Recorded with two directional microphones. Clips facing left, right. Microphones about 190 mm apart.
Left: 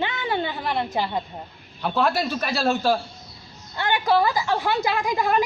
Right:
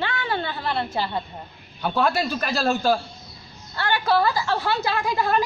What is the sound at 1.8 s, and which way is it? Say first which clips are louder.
Speech: even; centre (ahead or behind).